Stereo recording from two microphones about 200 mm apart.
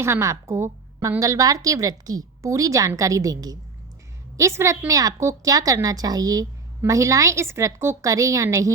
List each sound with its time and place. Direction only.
0.0 s a woman's voice: 15° right (ahead or behind)